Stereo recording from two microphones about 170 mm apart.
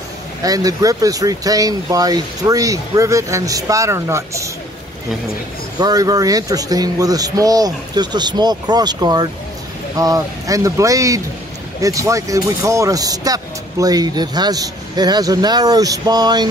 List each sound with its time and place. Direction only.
0.4 s speech: 20° right (ahead or behind)
5.8 s speech: 25° right (ahead or behind)